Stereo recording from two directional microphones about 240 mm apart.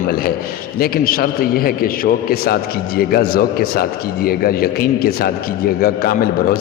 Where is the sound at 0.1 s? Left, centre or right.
Left.